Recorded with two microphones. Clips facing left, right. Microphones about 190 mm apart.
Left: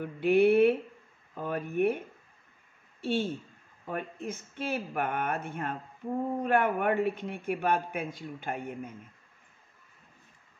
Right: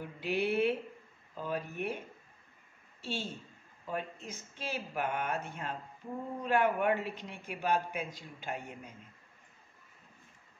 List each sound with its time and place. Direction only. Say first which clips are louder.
0.0 s speech: left 10 dB; 55° left (ahead or behind)